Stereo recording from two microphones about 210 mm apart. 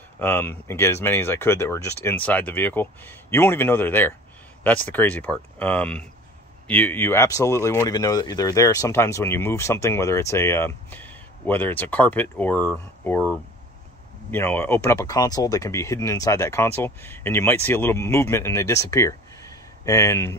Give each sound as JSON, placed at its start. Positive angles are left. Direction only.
{"t": 0.2, "sound": "speech", "side_deg": 10}